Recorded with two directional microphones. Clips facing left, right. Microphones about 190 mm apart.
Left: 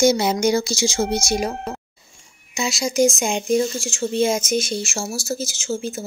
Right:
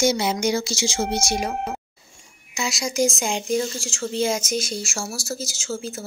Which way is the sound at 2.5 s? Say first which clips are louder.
Left 3 dB; 25° left (ahead or behind).